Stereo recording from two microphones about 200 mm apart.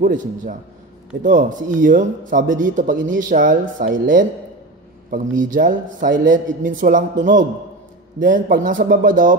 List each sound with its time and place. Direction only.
0.0 s a man's voice: 40° right (ahead or behind)